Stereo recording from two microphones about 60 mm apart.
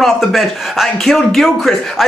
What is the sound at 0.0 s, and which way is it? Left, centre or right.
Speech, centre.